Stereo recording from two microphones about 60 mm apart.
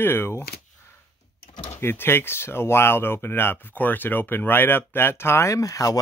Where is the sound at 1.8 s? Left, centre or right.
Left.